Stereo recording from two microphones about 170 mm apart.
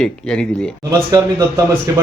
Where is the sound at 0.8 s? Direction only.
20° right (ahead or behind).